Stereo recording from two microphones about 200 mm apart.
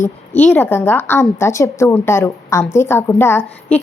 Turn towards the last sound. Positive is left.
turn(degrees=10)  # may be behind; listen again after turning